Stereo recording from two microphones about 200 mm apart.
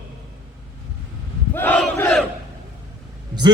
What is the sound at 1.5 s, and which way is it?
Battle cry, 10° left (ahead or behind).